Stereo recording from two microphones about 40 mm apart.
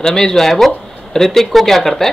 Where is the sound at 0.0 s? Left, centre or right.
Centre.